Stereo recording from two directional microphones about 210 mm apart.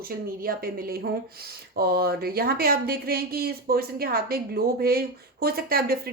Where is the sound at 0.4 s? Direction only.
45° right (ahead or behind).